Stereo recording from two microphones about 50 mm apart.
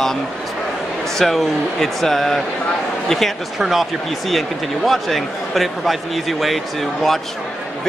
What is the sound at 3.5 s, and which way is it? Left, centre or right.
A man's voice, centre.